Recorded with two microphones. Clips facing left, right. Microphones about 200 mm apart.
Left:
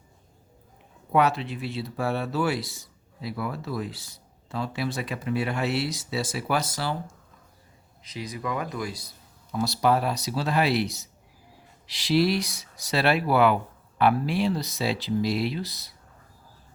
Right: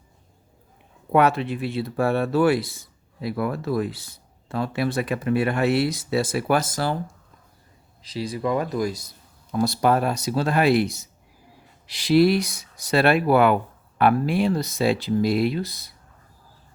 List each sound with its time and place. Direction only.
1.1 s speech: 55° right (ahead or behind)
8.0 s speech: 30° right (ahead or behind); by 15.9 s 50° right (ahead or behind)